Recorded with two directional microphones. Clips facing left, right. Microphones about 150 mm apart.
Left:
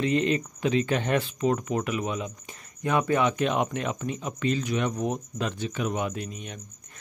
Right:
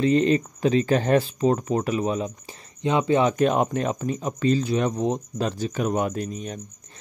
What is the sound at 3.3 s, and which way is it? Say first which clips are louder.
Speech: right 5 dB; 40° right (ahead or behind).